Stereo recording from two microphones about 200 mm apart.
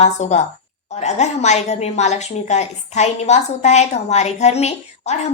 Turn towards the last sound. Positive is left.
turn(degrees=35)  # may be behind; listen again after turning